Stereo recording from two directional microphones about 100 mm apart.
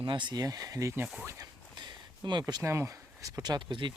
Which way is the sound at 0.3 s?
35° right (ahead or behind).